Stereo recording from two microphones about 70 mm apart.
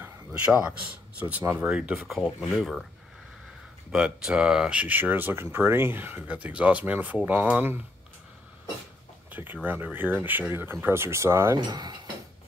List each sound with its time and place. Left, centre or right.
0.5 s speech: centre
1.2 s speech: right
1.7 s speech: centre
2.0 s speech: centre
3.9 s speech: centre; by 6.3 s right
6.3 s speech: centre
9.3 s speech: right
11.5 s speech: right